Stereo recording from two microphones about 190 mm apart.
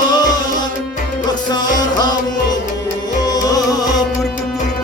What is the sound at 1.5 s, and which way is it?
Music, 20° left (ahead or behind).